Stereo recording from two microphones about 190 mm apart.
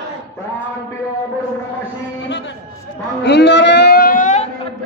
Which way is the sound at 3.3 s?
65° left (ahead or behind).